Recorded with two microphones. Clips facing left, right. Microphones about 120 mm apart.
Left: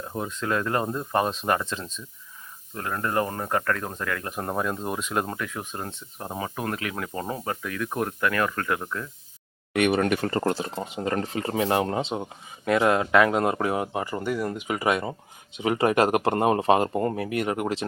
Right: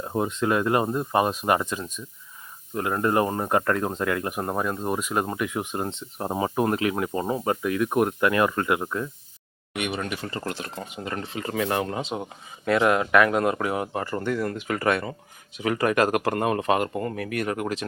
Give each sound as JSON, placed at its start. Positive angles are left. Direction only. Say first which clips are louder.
{"t": 0.0, "sound": "speech", "louder": "right 5 dB", "side_deg": -25}
{"t": 4.4, "sound": "speech", "louder": "right 1 dB", "side_deg": -5}
{"t": 5.4, "sound": "speech", "louder": "right 5 dB", "side_deg": -15}
{"t": 9.7, "sound": "speech", "louder": "left 7 dB", "side_deg": 55}
{"t": 10.6, "sound": "speech", "louder": "left 4 dB", "side_deg": 25}